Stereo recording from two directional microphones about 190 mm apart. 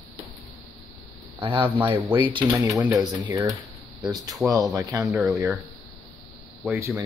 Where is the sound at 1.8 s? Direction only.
10° right (ahead or behind).